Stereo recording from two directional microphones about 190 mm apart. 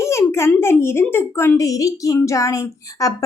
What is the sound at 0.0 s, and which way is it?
A child's voice, 15° left (ahead or behind).